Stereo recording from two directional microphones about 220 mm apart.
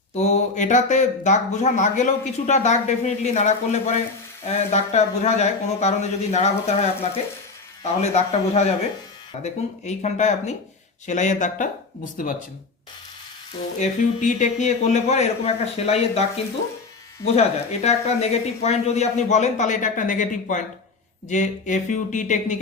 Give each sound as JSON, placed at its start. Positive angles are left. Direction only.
{"t": 0.1, "sound": "a man's voice", "side_deg": 30}
{"t": 13.7, "sound": "speech", "side_deg": 35}
{"t": 17.3, "sound": "speech", "side_deg": 30}